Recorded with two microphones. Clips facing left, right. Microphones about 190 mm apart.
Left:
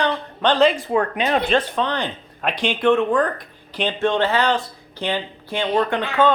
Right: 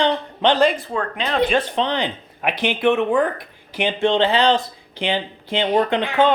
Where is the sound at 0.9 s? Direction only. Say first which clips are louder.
Left 4 dB; 20° left (ahead or behind).